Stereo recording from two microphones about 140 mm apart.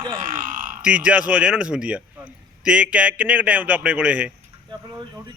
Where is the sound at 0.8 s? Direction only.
10° right (ahead or behind).